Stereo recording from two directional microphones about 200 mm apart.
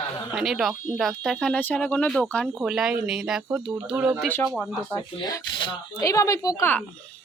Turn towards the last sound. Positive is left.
turn(degrees=10)  # may be behind; listen again after turning